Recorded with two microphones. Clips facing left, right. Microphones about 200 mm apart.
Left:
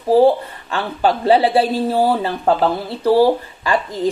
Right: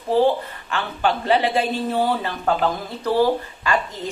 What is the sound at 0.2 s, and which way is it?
Speech, 35° left (ahead or behind).